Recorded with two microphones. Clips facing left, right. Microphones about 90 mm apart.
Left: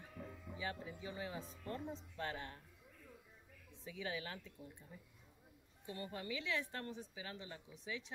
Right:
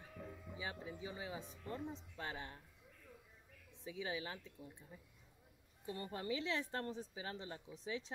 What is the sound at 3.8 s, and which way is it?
Speech, 15° right (ahead or behind).